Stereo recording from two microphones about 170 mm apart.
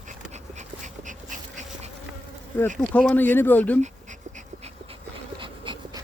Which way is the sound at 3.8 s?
45° right (ahead or behind).